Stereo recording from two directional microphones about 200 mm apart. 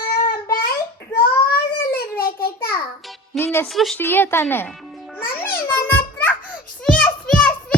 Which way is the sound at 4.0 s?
10° left (ahead or behind).